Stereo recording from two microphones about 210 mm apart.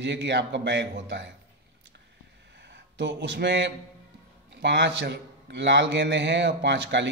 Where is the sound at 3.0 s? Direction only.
55° right (ahead or behind).